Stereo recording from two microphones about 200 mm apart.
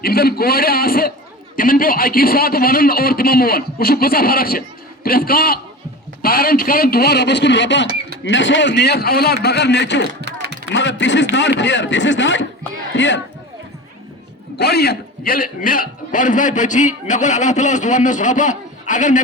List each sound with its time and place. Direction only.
0.0 s a man's voice: 50° left (ahead or behind)
10.2 s a sound: 55° right (ahead or behind)
10.7 s a man's voice: 65° left (ahead or behind)
14.6 s a man's voice: 50° left (ahead or behind)